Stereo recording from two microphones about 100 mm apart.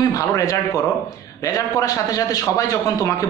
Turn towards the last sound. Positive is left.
turn(degrees=35)  # may be behind; listen again after turning